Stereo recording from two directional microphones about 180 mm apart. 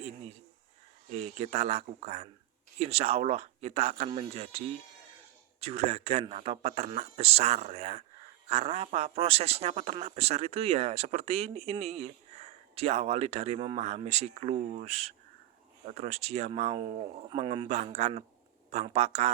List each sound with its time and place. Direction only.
1.1 s a man's voice: 35° right (ahead or behind)